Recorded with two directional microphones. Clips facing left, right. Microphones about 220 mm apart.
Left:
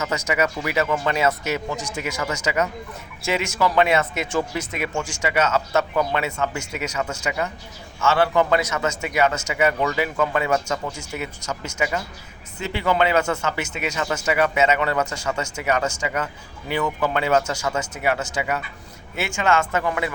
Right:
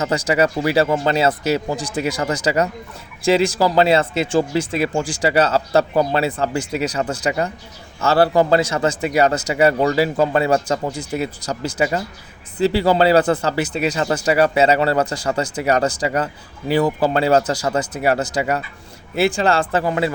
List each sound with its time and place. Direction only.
0.0 s speech: 35° right (ahead or behind)